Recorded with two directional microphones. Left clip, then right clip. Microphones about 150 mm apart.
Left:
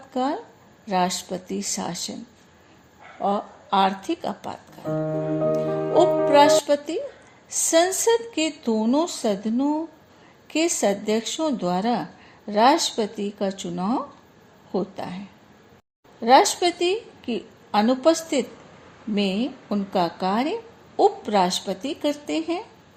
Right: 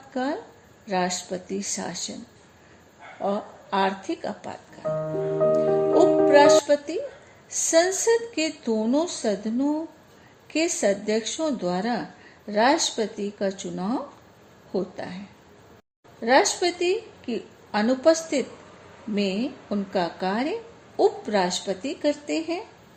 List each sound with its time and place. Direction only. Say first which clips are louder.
0.1 s a woman's voice: left 3 dB; 40° left (ahead or behind)
3.2 s a woman's voice: left 3 dB; 40° left (ahead or behind)
5.9 s music: left 1 dB; 40° left (ahead or behind)
6.7 s a woman's voice: even; 40° left (ahead or behind)
16.2 s a woman's voice: left 4 dB; 40° left (ahead or behind)